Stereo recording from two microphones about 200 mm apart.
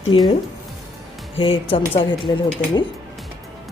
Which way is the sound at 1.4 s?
25° left (ahead or behind).